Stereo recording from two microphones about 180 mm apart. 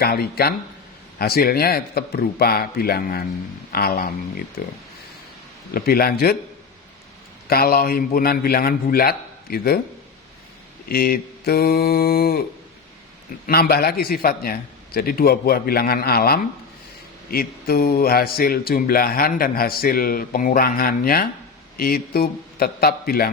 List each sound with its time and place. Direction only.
0.0 s speech: 55° left (ahead or behind)
5.7 s speech: 55° left (ahead or behind)
7.4 s speech: 55° left (ahead or behind)
10.8 s speech: 55° left (ahead or behind)
13.5 s speech: 60° left (ahead or behind)